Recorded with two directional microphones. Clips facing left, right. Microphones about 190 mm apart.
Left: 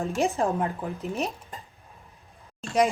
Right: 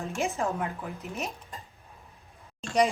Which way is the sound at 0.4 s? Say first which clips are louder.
Left 3 dB; 35° left (ahead or behind).